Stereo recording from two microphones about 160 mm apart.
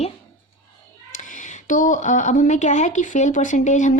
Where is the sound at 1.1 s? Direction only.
55° left (ahead or behind).